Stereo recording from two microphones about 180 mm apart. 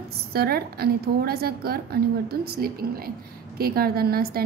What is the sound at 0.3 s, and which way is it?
A woman's voice, 60° right (ahead or behind).